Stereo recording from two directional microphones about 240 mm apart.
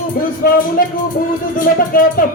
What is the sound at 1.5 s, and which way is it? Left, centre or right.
Music, left.